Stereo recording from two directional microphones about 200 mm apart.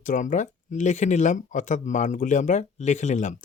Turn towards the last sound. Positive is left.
turn(degrees=35)  # may be behind; listen again after turning